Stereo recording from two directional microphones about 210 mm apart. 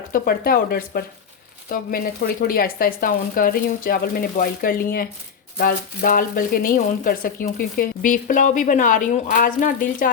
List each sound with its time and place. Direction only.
0.1 s speech: 45° left (ahead or behind)